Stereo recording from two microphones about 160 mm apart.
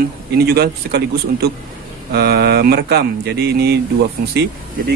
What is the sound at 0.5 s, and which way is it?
Speech, 80° right.